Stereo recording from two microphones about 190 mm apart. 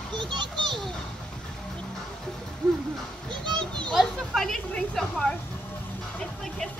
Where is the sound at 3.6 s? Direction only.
5° left (ahead or behind).